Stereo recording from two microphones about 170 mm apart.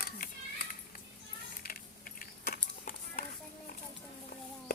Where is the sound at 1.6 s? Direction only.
60° left (ahead or behind).